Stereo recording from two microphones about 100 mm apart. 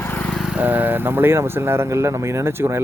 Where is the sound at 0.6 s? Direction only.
20° right (ahead or behind).